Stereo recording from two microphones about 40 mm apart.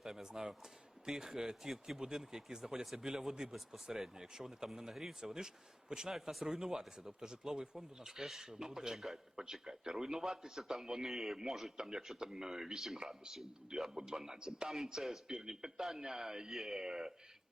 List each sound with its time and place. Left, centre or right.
0.0 s speech: centre
9.3 s speech: centre
16.8 s speech: centre